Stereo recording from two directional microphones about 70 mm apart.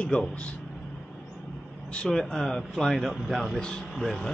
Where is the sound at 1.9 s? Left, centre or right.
Centre.